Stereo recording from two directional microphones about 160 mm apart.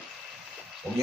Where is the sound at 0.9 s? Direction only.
10° left (ahead or behind).